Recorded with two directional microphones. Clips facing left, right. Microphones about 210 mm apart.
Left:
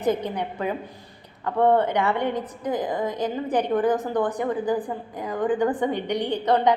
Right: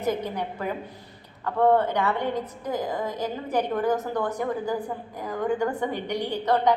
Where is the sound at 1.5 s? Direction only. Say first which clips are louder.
Left 1 dB; 15° left (ahead or behind).